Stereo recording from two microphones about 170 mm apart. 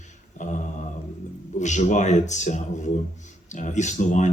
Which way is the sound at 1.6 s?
45° left (ahead or behind).